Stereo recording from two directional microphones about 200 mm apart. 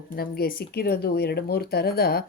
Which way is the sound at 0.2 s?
50° left (ahead or behind).